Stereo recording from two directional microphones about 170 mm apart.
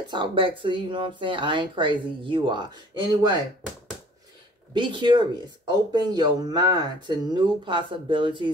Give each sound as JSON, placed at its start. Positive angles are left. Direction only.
{"t": 0.1, "sound": "speech", "side_deg": -30}
{"t": 4.7, "sound": "speech", "side_deg": -25}